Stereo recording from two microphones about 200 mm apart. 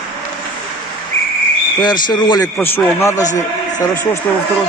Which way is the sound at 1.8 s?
20° left (ahead or behind).